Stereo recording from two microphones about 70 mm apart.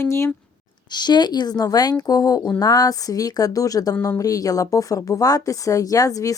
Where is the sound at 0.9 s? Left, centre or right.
Left.